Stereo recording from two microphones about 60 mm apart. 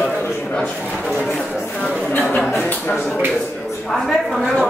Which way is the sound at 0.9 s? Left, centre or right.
Centre.